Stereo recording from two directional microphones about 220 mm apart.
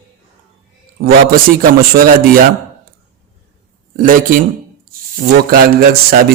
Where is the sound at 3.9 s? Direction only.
40° right (ahead or behind).